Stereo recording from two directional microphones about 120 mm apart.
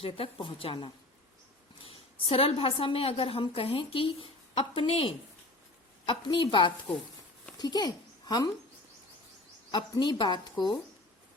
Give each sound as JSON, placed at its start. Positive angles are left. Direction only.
{"t": 0.0, "sound": "a woman's voice", "side_deg": 45}
{"t": 1.9, "sound": "a woman's voice", "side_deg": 50}
{"t": 9.7, "sound": "a woman's voice", "side_deg": 40}